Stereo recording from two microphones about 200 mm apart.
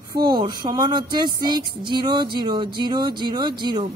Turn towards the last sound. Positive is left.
turn(degrees=-20)  # may be behind; listen again after turning